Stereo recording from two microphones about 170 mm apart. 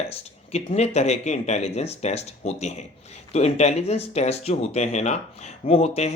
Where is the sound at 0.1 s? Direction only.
35° left (ahead or behind).